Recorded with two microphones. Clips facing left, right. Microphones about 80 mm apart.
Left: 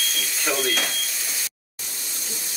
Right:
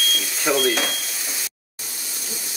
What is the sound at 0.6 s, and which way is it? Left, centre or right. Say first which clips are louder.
Speech: right 4 dB; centre.